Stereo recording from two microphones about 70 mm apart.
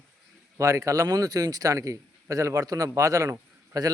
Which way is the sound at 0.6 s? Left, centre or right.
Right.